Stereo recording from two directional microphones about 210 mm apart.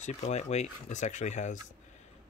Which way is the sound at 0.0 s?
35° left (ahead or behind).